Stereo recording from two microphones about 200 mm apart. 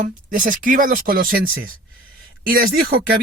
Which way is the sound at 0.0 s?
40° right (ahead or behind).